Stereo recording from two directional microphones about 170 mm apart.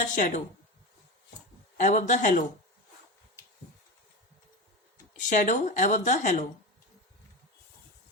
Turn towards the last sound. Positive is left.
turn(degrees=45)  # may be behind; listen again after turning